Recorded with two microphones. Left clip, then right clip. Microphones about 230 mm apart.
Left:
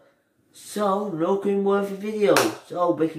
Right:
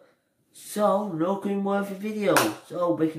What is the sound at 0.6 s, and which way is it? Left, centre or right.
Speech, centre.